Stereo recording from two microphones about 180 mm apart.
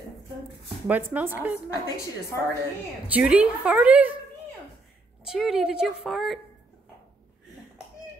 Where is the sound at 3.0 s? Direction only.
5° right (ahead or behind).